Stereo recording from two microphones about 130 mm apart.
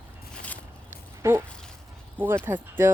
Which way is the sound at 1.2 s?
20° right (ahead or behind).